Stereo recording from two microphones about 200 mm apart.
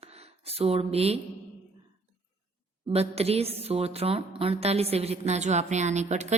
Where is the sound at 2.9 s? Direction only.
30° right (ahead or behind).